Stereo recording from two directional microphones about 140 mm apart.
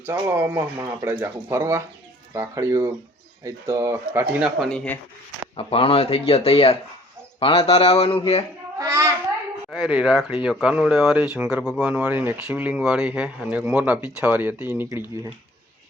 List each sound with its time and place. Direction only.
0.0 s speech: 15° right (ahead or behind)
5.5 s speech: 40° left (ahead or behind)
8.8 s child singing: 20° right (ahead or behind)
9.6 s speech: 5° right (ahead or behind)